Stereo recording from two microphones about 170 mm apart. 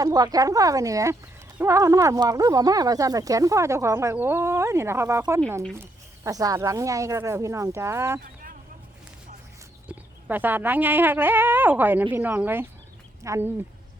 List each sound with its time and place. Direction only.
0.0 s speech: 20° right (ahead or behind)
8.2 s a sound: 55° right (ahead or behind)
10.2 s speech: 10° right (ahead or behind)